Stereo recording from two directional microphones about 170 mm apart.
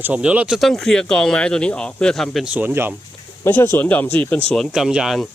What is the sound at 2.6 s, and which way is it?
Speech, 10° right (ahead or behind).